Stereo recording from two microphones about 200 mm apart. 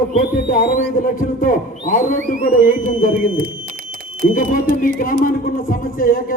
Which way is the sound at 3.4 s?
45° right (ahead or behind).